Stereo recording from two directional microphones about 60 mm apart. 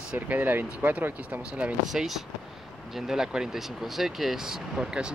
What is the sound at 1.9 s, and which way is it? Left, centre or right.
Speech, centre.